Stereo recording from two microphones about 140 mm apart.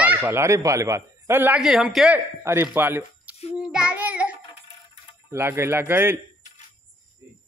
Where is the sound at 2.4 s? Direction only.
15° right (ahead or behind).